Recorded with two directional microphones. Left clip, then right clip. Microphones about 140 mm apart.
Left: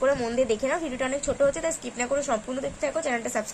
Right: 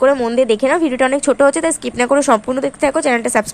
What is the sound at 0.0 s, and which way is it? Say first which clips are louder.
A woman's voice: right 11 dB; 25° right (ahead or behind).